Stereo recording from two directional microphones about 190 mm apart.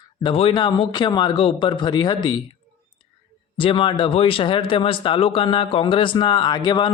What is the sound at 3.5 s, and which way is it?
Speech, 25° left (ahead or behind).